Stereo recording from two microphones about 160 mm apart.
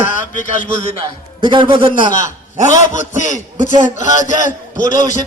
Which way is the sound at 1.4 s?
30° right (ahead or behind).